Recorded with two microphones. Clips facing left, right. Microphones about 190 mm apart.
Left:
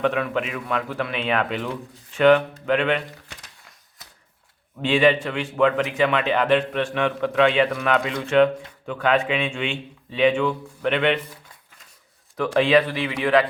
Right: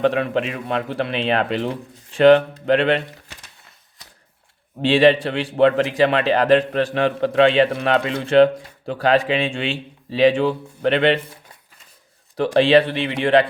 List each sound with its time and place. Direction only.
0.0 s a man's voice: 30° right (ahead or behind)
4.8 s a man's voice: 30° right (ahead or behind)
12.5 s speech: 30° right (ahead or behind)